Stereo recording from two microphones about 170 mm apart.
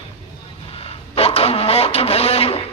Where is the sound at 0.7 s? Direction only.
35° left (ahead or behind).